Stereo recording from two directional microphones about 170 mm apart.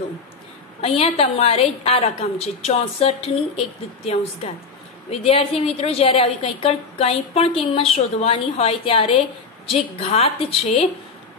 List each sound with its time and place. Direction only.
0.7 s a woman's voice: 35° left (ahead or behind)